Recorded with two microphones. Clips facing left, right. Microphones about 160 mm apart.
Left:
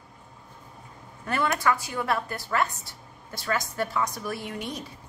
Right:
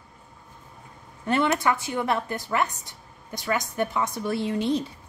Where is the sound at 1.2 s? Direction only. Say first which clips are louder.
Right 3 dB; 25° right (ahead or behind).